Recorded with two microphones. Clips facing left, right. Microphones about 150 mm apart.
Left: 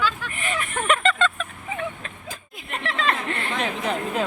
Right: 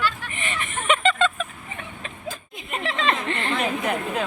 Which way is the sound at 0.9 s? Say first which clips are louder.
Right 1 dB; centre (ahead or behind).